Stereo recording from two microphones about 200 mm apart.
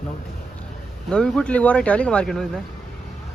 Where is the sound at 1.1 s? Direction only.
5° left (ahead or behind).